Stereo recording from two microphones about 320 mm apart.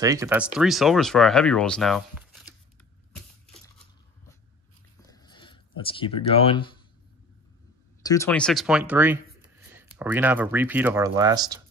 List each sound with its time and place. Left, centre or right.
0.0 s speech: centre
5.0 s a sound: centre
8.0 s speech: centre